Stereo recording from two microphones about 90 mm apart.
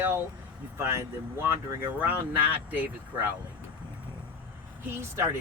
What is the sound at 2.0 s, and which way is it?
Speech, 20° right (ahead or behind).